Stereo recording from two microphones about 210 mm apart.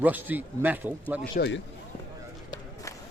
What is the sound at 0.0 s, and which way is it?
Speech, 10° right (ahead or behind).